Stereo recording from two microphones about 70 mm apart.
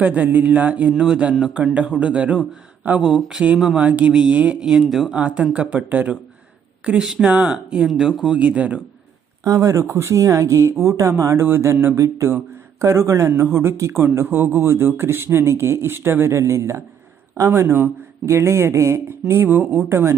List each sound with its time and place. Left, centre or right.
0.0 s speech: right; by 5.1 s centre
5.1 s speech: centre
9.4 s speech: right
9.8 s speech: right
12.0 s speech: right